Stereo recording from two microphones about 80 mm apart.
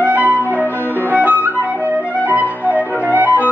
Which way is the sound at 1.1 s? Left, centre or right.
Right.